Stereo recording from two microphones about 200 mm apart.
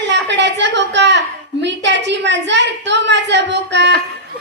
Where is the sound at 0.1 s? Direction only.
60° right (ahead or behind).